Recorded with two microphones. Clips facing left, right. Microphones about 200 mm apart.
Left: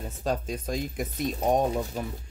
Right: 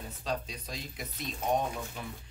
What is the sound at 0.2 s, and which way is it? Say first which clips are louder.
Speech: left 7 dB; 50° left (ahead or behind).